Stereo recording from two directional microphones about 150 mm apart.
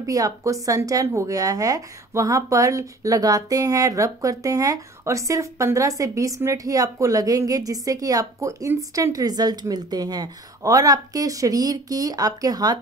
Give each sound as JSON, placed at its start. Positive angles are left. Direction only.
{"t": 0.0, "sound": "speech", "side_deg": -20}